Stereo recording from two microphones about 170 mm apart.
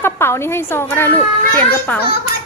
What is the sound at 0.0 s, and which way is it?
A woman's voice, 15° left (ahead or behind).